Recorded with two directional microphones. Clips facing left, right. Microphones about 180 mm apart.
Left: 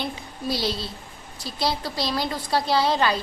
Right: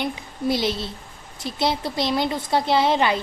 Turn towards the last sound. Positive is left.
turn(degrees=-20)  # may be behind; listen again after turning